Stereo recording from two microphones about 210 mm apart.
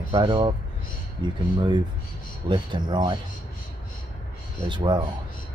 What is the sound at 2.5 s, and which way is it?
Speech, 20° right (ahead or behind).